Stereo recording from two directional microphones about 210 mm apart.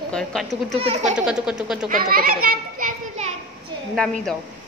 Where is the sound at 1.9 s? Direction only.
45° right (ahead or behind).